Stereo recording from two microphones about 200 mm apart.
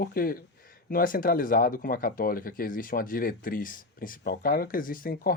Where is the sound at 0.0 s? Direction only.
50° left (ahead or behind).